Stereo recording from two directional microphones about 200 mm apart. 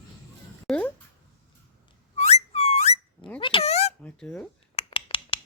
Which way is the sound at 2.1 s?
35° left (ahead or behind).